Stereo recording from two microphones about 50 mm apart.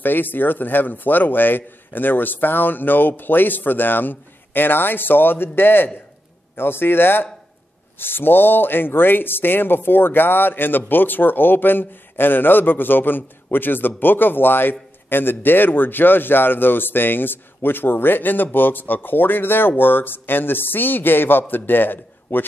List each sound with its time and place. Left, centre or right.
0.0 s a man's voice: left